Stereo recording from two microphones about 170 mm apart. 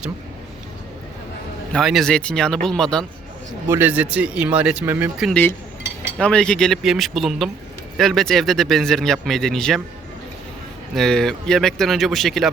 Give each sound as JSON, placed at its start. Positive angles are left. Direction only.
{"t": 1.7, "sound": "speech", "side_deg": 0}
{"t": 3.7, "sound": "speech", "side_deg": -10}
{"t": 5.3, "sound": "speech", "side_deg": 10}
{"t": 10.9, "sound": "speech", "side_deg": 5}